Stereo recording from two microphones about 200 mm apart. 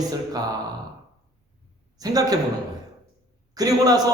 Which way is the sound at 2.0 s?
20° right (ahead or behind).